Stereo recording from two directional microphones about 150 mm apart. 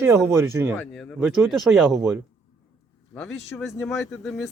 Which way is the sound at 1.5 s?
Centre (ahead or behind).